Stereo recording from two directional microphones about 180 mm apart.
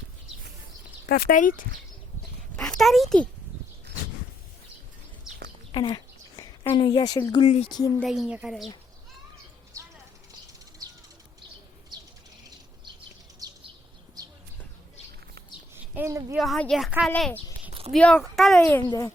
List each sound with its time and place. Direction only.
1.0 s speech: 55° left (ahead or behind)
2.6 s a child's voice: 5° left (ahead or behind)
5.7 s a sound: 25° left (ahead or behind)
6.7 s speech: 25° left (ahead or behind)
7.9 s a woman's voice: centre (ahead or behind)
15.7 s speech: 10° right (ahead or behind)
16.4 s a woman's voice: centre (ahead or behind)
17.7 s a sound: 35° right (ahead or behind)
17.9 s a woman's voice: 5° left (ahead or behind)
18.8 s speech: 20° left (ahead or behind)